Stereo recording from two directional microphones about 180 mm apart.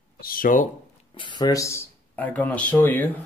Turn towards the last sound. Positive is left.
turn(degrees=10)  # may be behind; listen again after turning